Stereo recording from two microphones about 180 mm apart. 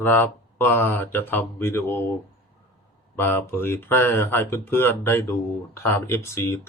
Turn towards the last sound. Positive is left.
turn(degrees=15)  # may be behind; listen again after turning